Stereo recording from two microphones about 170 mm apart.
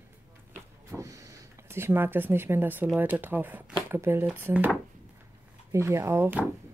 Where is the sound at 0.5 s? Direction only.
15° right (ahead or behind).